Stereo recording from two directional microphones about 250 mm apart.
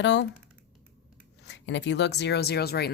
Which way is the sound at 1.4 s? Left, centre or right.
Left.